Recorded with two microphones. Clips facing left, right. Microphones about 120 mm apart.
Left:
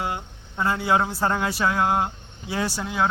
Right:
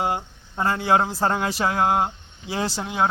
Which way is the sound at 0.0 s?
30° right (ahead or behind).